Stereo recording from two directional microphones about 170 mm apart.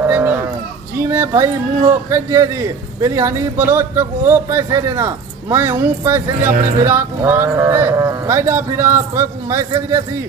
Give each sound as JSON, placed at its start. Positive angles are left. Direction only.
{"t": 0.0, "sound": "livestock", "side_deg": -10}
{"t": 0.9, "sound": "a sound", "side_deg": -15}
{"t": 2.0, "sound": "speech", "side_deg": -15}